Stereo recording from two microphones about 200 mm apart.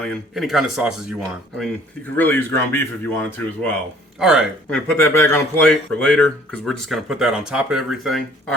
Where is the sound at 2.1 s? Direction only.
10° left (ahead or behind).